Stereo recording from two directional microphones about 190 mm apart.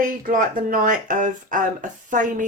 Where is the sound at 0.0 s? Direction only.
45° right (ahead or behind).